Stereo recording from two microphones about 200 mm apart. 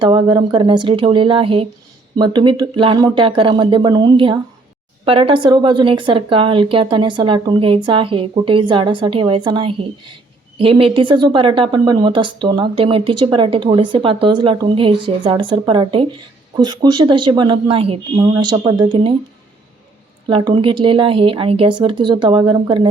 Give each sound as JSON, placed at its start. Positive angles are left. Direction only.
{"t": 0.0, "sound": "a woman's voice", "side_deg": -25}
{"t": 20.2, "sound": "a woman's voice", "side_deg": -25}